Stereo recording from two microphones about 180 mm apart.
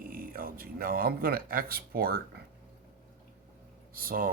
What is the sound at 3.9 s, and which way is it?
Speech, 55° right (ahead or behind).